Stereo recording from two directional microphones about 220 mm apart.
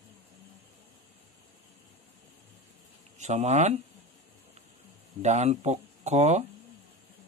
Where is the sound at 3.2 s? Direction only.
30° right (ahead or behind).